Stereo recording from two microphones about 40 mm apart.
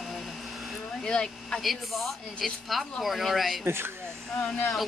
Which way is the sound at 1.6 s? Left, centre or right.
Centre.